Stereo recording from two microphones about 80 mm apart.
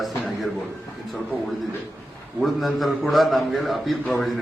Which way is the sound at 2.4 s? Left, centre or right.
Centre.